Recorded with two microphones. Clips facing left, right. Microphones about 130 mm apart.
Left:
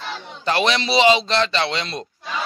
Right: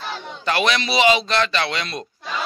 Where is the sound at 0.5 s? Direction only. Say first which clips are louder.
Left 1 dB; 30° left (ahead or behind).